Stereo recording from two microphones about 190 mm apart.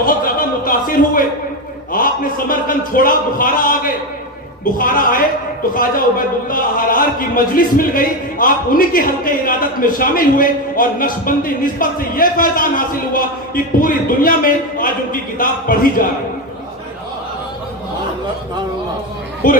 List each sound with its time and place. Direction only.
0.0 s a sound: 45° left (ahead or behind)
1.9 s a man's voice: 45° left (ahead or behind)
19.4 s a man's voice: 45° left (ahead or behind)